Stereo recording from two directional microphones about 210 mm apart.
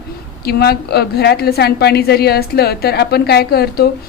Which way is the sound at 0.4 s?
50° left (ahead or behind).